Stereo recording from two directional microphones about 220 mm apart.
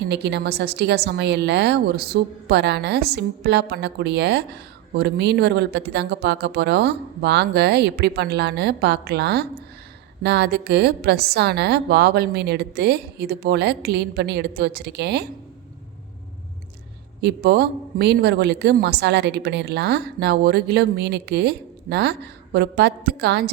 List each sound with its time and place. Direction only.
0.1 s a woman's voice: 50° right (ahead or behind)
17.2 s a woman's voice: 45° right (ahead or behind)